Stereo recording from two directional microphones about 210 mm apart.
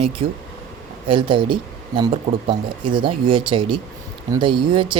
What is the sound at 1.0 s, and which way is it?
Speech, 25° right (ahead or behind).